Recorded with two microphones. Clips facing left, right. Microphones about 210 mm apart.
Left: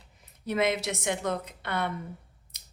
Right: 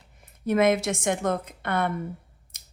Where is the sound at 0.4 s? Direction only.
50° right (ahead or behind).